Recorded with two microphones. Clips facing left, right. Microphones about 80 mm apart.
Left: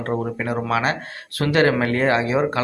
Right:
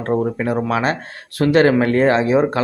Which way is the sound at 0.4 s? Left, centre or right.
Right.